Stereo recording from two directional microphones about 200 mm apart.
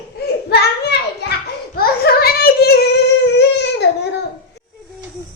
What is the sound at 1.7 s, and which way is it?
Singing, 50° left (ahead or behind).